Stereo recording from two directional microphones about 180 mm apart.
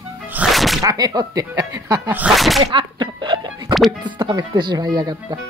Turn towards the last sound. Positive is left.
turn(degrees=-20)  # may be behind; listen again after turning